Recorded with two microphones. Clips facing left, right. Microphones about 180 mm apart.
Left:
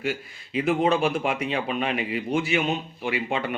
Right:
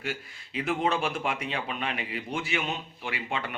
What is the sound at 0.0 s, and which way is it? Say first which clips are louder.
A man's voice: left 6 dB; 15° left (ahead or behind).